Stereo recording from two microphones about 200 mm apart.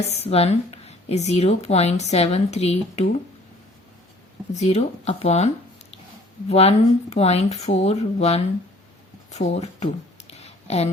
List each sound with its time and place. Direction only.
0.0 s speech: 30° left (ahead or behind)
4.5 s speech: 35° left (ahead or behind)
6.5 s speech: 30° left (ahead or behind)
9.3 s a sound: 35° left (ahead or behind)